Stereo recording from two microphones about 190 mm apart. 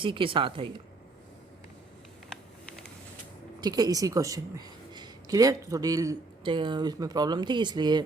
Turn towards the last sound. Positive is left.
turn(degrees=-20)  # may be behind; listen again after turning